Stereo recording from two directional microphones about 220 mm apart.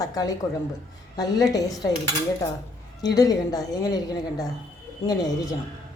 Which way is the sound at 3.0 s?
15° left (ahead or behind).